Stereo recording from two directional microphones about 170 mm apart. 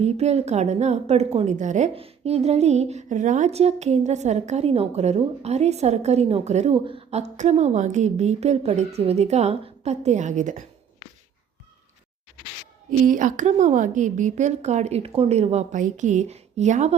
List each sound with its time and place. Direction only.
0.0 s a woman's voice: 40° right (ahead or behind)
13.1 s a woman's voice: 50° right (ahead or behind)